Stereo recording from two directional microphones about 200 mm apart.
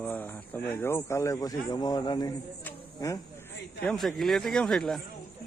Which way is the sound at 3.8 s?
5° left (ahead or behind).